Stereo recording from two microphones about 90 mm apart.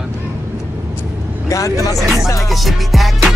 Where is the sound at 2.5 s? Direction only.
Centre (ahead or behind).